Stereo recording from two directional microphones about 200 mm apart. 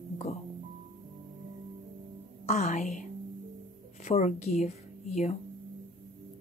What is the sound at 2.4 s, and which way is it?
A woman's voice, 35° left (ahead or behind).